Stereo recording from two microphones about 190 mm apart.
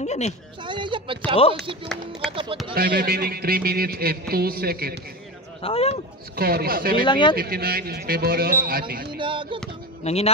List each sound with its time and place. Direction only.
0.0 s a sound: 35° left (ahead or behind)
0.7 s speech: 25° right (ahead or behind)
2.7 s a man's voice: 55° right (ahead or behind)
5.6 s speech: 30° left (ahead or behind)
6.3 s a man's voice: 55° right (ahead or behind)
7.1 s speech: 25° left (ahead or behind)
7.3 s a man's voice: 55° right (ahead or behind)
9.2 s a sound: 25° right (ahead or behind)
10.0 s speech: 35° left (ahead or behind)